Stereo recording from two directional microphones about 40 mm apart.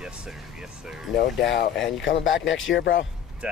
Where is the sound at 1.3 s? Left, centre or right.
Centre.